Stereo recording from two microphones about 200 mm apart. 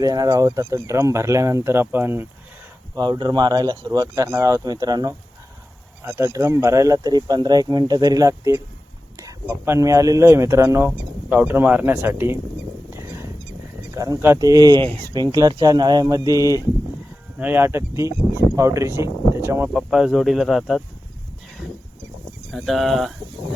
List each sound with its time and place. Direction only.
0.0 s speech: 20° right (ahead or behind)
2.9 s speech: 20° right (ahead or behind)
12.9 s a sound: 15° right (ahead or behind)
13.9 s speech: 15° right (ahead or behind); by 20.8 s centre (ahead or behind)
22.5 s speech: centre (ahead or behind)